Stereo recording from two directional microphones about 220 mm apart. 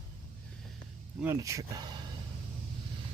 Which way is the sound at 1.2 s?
15° right (ahead or behind).